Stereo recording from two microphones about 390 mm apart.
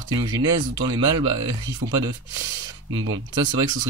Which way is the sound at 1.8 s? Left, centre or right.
Right.